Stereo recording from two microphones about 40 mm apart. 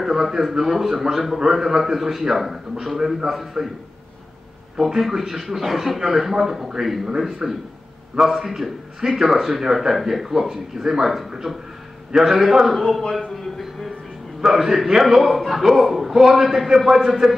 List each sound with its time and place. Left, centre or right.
0.0 s a man's voice: centre
4.7 s a man's voice: centre
7.4 s a man's voice: centre
13.0 s music: centre
14.4 s a man's voice: centre